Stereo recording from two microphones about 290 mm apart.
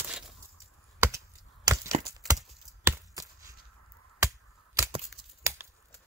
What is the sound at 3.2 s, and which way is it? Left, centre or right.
Chop, centre.